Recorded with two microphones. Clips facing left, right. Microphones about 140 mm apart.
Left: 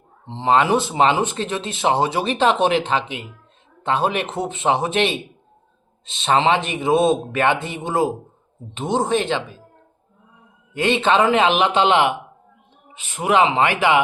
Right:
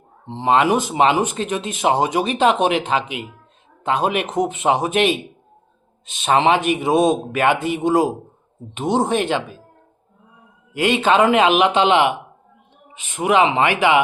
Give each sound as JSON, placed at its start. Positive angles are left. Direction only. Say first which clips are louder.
{"t": 0.3, "sound": "speech", "louder": "right 1 dB", "side_deg": -15}
{"t": 6.1, "sound": "speech", "louder": "right 1 dB", "side_deg": -15}
{"t": 10.8, "sound": "speech", "louder": "right 1 dB", "side_deg": -10}
{"t": 13.0, "sound": "speech", "louder": "right 1 dB", "side_deg": 40}